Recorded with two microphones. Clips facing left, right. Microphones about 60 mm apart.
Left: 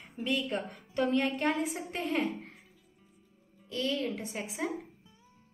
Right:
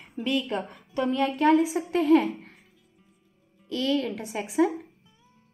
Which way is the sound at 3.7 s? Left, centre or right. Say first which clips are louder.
Right 6 dB; right.